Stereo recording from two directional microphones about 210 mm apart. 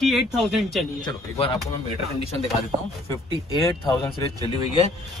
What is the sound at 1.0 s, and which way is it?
Speech, 25° left (ahead or behind).